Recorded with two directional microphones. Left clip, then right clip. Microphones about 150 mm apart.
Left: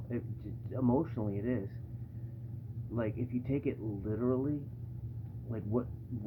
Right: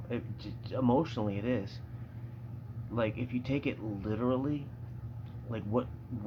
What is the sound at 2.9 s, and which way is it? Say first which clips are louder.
Speech: right 4 dB; 15° right (ahead or behind).